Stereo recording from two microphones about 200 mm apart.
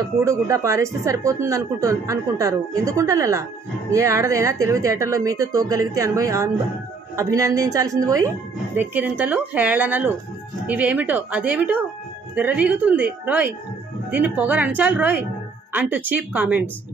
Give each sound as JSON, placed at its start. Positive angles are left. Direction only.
{"t": 0.2, "sound": "a woman's voice", "side_deg": -15}